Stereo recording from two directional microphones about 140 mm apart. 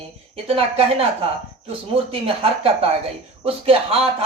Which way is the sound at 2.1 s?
40° right (ahead or behind).